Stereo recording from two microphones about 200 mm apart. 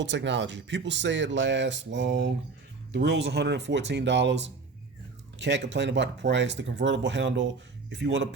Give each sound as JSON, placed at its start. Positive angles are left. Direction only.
{"t": 0.0, "sound": "speech", "side_deg": -65}
{"t": 5.4, "sound": "speech", "side_deg": -60}